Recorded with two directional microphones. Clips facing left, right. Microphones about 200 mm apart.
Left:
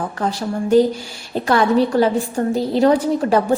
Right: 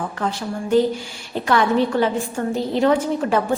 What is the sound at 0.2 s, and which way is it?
A woman's voice, 40° left (ahead or behind).